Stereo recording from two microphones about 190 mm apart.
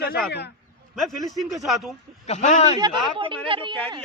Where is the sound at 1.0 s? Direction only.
Centre (ahead or behind).